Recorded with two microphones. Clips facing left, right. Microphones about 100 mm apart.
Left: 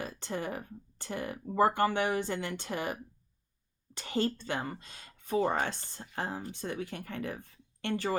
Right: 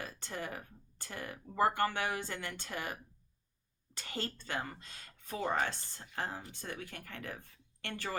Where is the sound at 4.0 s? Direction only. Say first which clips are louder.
Left 10 dB; 25° left (ahead or behind).